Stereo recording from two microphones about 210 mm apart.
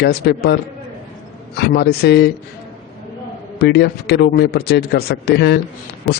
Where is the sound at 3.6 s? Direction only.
50° left (ahead or behind).